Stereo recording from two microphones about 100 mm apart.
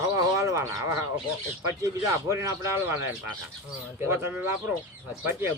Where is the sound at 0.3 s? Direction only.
30° right (ahead or behind).